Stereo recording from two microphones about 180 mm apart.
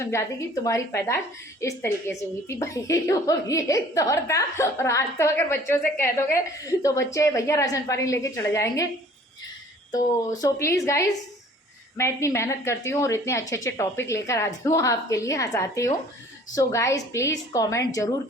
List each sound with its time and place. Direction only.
0.0 s a woman's voice: 15° left (ahead or behind)
10.4 s a woman's voice: 15° left (ahead or behind)